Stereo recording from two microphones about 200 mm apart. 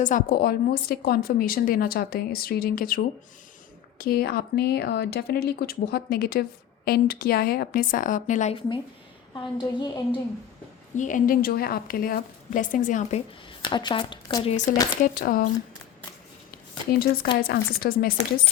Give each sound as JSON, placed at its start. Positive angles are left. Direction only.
{"t": 0.0, "sound": "a woman's voice", "side_deg": 40}
{"t": 10.9, "sound": "a woman's voice", "side_deg": 40}
{"t": 15.0, "sound": "speech", "side_deg": 45}
{"t": 16.9, "sound": "speech", "side_deg": 50}